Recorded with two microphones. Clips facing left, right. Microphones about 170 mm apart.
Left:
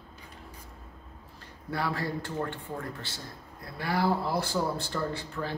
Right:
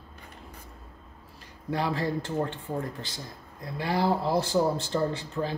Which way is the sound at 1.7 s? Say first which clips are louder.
Right 3 dB; 20° right (ahead or behind).